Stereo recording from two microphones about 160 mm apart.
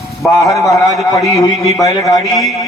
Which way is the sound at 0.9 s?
20° left (ahead or behind).